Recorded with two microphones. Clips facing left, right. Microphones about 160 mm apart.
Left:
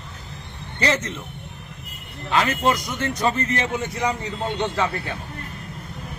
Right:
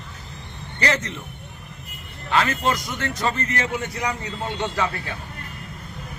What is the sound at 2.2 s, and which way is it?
A man's voice, 20° left (ahead or behind).